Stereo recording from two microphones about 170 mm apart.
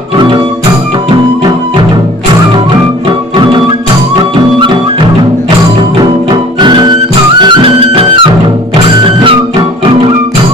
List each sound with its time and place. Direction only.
6.6 s music: 25° right (ahead or behind)